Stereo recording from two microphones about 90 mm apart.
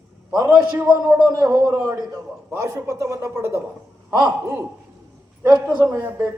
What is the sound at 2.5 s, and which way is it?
Speech, 30° right (ahead or behind).